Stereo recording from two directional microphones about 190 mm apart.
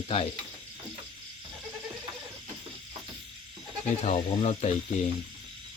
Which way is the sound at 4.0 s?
35° left (ahead or behind).